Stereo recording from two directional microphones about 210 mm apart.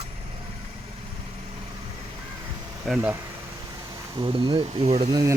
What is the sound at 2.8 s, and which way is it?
Speech, 5° right (ahead or behind).